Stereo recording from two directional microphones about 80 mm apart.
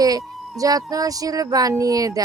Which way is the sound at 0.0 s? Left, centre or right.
Right.